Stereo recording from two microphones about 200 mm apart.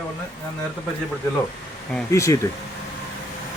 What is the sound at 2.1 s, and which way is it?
Speech, 15° left (ahead or behind).